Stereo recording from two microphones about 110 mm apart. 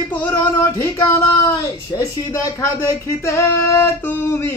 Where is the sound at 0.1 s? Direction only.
15° left (ahead or behind).